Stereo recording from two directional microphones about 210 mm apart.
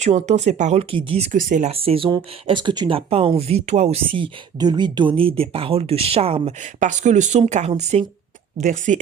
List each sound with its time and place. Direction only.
0.0 s speech: 35° right (ahead or behind)